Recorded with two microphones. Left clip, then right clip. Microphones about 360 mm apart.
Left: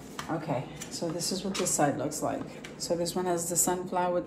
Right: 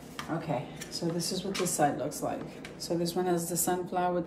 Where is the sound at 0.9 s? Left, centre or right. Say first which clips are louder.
Left 1 dB; centre.